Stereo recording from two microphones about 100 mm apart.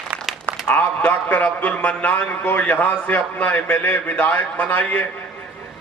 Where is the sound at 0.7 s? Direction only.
20° left (ahead or behind).